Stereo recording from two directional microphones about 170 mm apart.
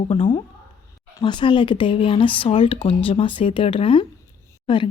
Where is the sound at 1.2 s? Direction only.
30° left (ahead or behind).